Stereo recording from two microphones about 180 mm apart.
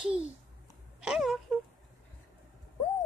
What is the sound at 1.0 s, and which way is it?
Speech, 5° right (ahead or behind).